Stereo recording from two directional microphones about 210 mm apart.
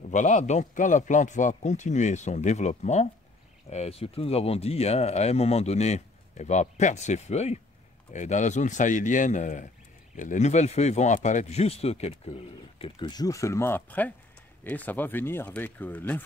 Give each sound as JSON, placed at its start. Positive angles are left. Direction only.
{"t": 0.1, "sound": "speech", "side_deg": 35}